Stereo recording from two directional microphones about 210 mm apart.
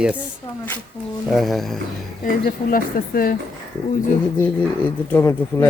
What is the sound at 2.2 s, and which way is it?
Speech, 45° left (ahead or behind).